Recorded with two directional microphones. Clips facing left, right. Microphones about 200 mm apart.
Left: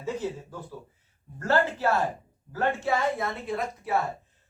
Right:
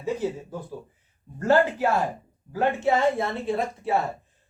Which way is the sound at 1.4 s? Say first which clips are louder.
Right 5 dB; 15° right (ahead or behind).